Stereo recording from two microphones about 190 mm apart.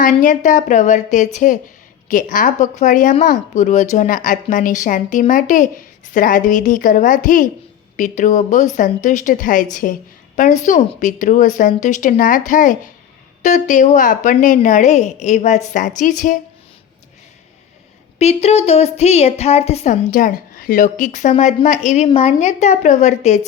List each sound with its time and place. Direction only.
0.0 s a woman's voice: 45° left (ahead or behind)
18.2 s a woman's voice: 35° left (ahead or behind)